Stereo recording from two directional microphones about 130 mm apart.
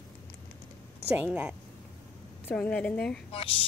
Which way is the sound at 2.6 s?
10° left (ahead or behind).